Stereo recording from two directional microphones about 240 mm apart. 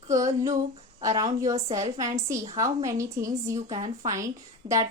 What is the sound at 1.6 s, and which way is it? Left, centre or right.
Speech, right.